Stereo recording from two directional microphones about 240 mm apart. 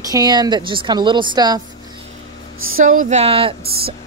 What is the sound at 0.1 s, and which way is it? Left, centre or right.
A woman's voice, centre.